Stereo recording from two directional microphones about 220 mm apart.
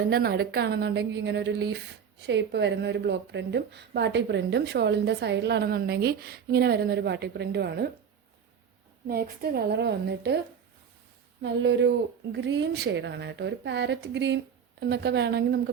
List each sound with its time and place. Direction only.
0.1 s speech: 45° right (ahead or behind)
9.0 s speech: 45° right (ahead or behind)
11.4 s speech: 55° right (ahead or behind)